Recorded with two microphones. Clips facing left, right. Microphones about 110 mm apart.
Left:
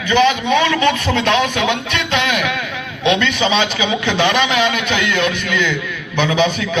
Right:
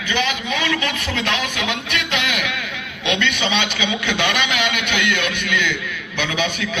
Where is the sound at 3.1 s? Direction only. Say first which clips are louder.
Left 5 dB; 35° left (ahead or behind).